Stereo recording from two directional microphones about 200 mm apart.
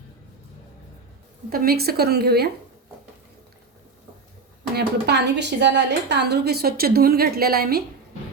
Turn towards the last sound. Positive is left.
turn(degrees=-50)  # may be behind; listen again after turning